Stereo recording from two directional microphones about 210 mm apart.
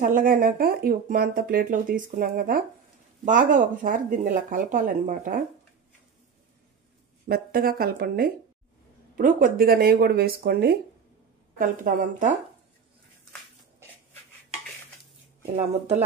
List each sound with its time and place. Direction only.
0.0 s speech: 40° right (ahead or behind)
7.2 s speech: 45° right (ahead or behind)